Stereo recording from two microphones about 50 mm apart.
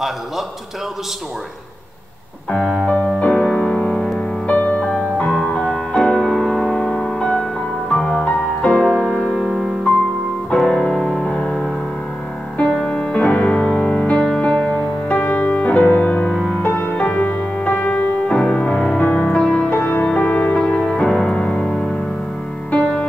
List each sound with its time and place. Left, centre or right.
2.5 s music: left
5.5 s music: centre
12.5 s music: left
19.7 s music: left; by 21.8 s centre
22.7 s music: left